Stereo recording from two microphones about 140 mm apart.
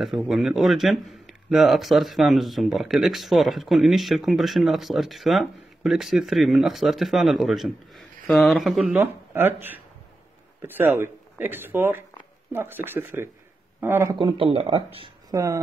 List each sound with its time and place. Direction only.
0.0 s speech: centre (ahead or behind)
8.9 s speech: 15° right (ahead or behind)
14.1 s speech: 35° right (ahead or behind)
15.3 s speech: 20° right (ahead or behind)